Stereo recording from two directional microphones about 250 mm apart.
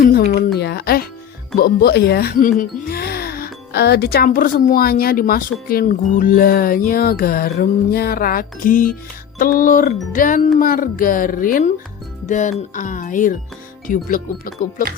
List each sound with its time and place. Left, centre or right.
0.0 s a sound: left
0.6 s music: left
1.5 s speech: left